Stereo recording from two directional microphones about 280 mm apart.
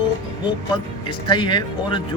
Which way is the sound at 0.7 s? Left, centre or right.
Centre.